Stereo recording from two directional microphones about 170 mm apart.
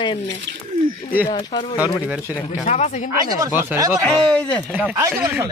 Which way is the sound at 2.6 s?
45° left (ahead or behind).